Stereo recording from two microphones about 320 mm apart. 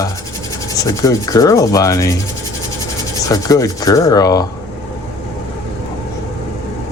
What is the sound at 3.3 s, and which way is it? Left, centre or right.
Rub, centre.